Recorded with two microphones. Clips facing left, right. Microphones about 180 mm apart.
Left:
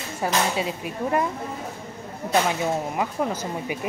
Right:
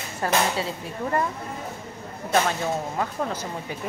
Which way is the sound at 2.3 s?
10° left (ahead or behind).